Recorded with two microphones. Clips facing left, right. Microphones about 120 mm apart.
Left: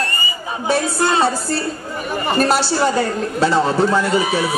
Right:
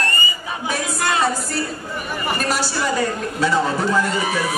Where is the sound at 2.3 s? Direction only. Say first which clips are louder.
Left 7 dB; 30° left (ahead or behind).